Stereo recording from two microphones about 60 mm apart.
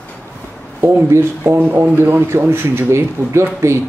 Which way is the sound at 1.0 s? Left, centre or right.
Right.